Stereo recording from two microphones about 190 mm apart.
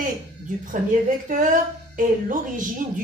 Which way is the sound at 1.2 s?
45° right (ahead or behind).